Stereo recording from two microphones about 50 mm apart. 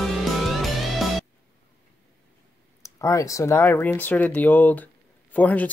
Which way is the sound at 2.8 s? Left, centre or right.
Left.